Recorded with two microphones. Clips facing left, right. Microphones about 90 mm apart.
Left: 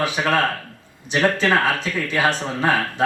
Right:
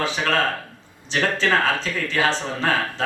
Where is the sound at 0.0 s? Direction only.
15° left (ahead or behind).